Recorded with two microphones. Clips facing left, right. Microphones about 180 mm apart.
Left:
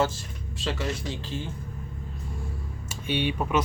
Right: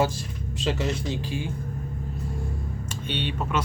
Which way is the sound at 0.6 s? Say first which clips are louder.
Right 3 dB; 20° right (ahead or behind).